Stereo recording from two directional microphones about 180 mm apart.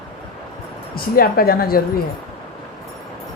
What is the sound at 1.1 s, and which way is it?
Speech, 55° left (ahead or behind).